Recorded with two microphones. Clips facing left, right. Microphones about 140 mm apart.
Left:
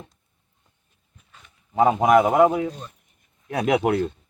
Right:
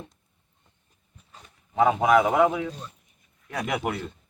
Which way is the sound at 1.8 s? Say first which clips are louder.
Left 3 dB; 35° left (ahead or behind).